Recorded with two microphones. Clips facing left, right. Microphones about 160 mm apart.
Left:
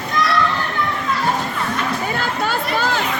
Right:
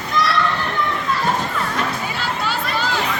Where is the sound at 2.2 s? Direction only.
50° left (ahead or behind).